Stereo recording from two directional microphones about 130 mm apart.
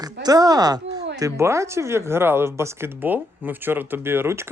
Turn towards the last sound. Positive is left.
turn(degrees=-20)  # may be behind; listen again after turning